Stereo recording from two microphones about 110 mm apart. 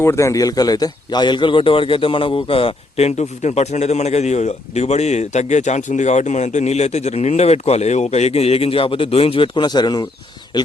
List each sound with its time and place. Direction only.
0.0 s a man's voice: 25° left (ahead or behind); by 10.7 s 45° left (ahead or behind)